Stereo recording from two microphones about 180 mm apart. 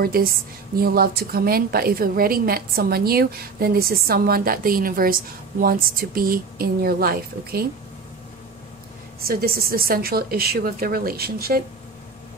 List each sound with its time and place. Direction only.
0.0 s a woman's voice: 55° right (ahead or behind)
9.2 s a woman's voice: 55° right (ahead or behind)